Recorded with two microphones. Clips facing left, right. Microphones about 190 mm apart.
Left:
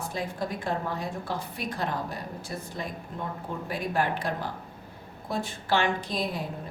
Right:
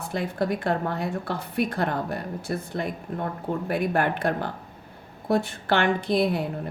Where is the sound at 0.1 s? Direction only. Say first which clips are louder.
Right 9 dB; 65° right (ahead or behind).